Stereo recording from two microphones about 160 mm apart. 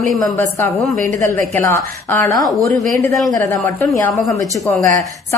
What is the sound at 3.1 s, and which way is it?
Speech, centre (ahead or behind).